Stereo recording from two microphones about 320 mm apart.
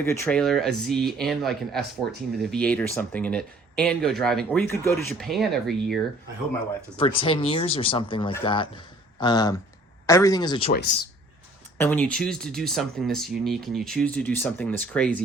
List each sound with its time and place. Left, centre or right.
0.0 s speech: centre
7.0 s speech: centre
10.7 s speech: left
11.8 s speech: centre